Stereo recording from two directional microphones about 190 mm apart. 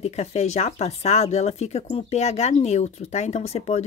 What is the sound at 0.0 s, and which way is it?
Speech, 35° left (ahead or behind).